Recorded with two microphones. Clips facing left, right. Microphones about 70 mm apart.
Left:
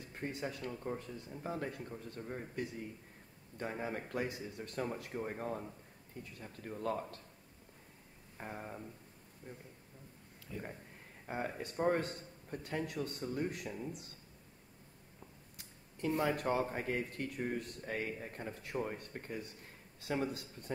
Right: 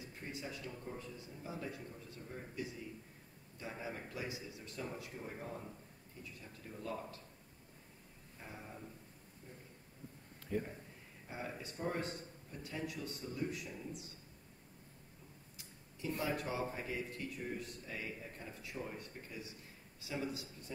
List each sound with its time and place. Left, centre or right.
0.0 s speech: left
8.4 s speech: left
10.5 s speech: right
11.2 s speech: left
15.5 s speech: left